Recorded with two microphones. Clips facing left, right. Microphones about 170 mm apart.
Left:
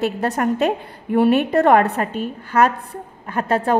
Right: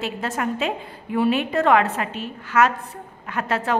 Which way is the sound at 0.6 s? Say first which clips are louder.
Left 6 dB; 40° left (ahead or behind).